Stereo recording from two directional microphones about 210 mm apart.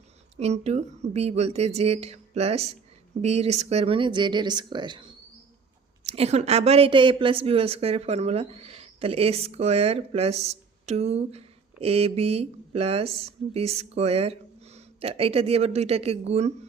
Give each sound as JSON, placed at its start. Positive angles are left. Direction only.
{"t": 0.3, "sound": "a woman's voice", "side_deg": -30}
{"t": 6.1, "sound": "a woman's voice", "side_deg": -30}